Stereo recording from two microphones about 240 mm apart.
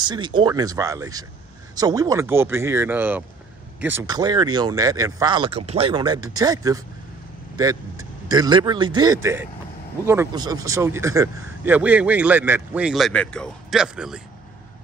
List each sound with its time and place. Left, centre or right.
0.0 s a man's voice: centre
8.3 s a man's voice: centre